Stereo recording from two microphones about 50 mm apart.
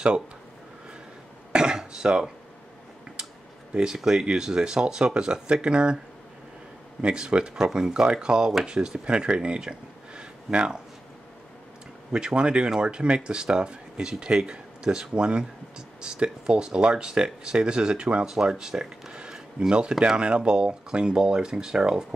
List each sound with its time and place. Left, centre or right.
1.5 s a sound: centre
3.7 s speech: centre
7.0 s speech: centre
12.1 s speech: centre